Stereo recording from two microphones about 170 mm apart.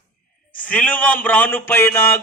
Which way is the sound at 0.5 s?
10° left (ahead or behind).